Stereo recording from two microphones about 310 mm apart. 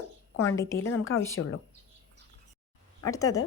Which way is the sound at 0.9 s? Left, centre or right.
Left.